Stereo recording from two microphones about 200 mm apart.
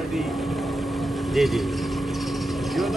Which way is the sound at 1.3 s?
Centre (ahead or behind).